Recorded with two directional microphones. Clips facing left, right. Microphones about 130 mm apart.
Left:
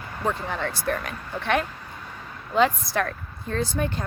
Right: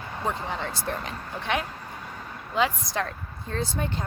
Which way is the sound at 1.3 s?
60° left (ahead or behind).